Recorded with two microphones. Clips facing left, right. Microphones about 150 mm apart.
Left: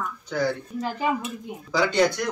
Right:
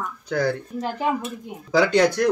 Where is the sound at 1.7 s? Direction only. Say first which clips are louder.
Right 4 dB; 60° right (ahead or behind).